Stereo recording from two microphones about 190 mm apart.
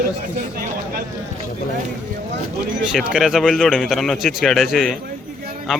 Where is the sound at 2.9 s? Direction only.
Centre (ahead or behind).